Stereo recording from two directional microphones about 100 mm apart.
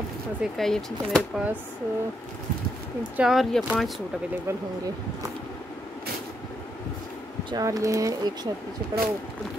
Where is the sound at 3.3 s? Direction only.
Centre (ahead or behind).